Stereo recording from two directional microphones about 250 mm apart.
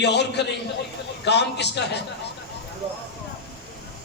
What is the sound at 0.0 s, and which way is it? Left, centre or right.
A man's voice, left.